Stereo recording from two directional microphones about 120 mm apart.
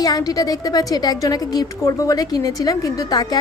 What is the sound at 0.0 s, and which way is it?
A woman's voice, 30° left (ahead or behind).